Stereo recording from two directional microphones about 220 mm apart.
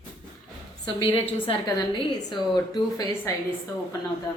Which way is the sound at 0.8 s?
25° left (ahead or behind).